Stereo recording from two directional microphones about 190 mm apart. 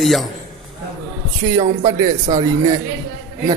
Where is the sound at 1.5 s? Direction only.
15° right (ahead or behind).